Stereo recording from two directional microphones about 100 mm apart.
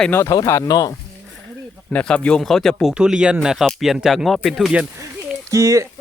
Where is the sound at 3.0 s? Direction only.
10° right (ahead or behind).